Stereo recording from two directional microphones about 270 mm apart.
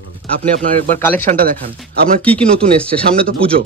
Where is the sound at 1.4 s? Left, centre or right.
Right.